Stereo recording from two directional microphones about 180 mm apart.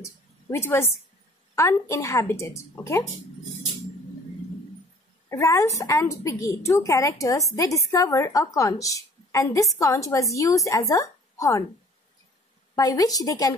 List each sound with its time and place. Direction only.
0.0 s a sound: 15° left (ahead or behind)
1.5 s a woman's voice: 15° left (ahead or behind)
5.3 s a woman's voice: 15° left (ahead or behind)
12.7 s a woman's voice: 20° left (ahead or behind)